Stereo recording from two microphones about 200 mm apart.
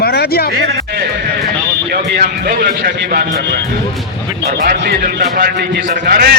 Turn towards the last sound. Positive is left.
turn(degrees=-50)  # may be behind; listen again after turning